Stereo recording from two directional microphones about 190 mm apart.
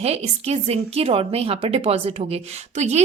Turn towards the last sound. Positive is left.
turn(degrees=-35)  # may be behind; listen again after turning